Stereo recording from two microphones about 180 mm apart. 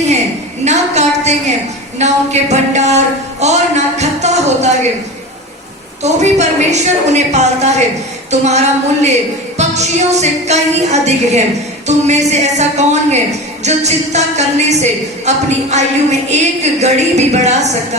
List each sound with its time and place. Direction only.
0.6 s a sound: 40° right (ahead or behind)
2.0 s a woman's voice: 40° right (ahead or behind)
6.0 s a woman's voice: 40° right (ahead or behind)